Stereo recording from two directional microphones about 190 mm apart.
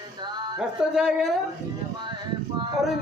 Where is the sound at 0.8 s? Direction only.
5° right (ahead or behind).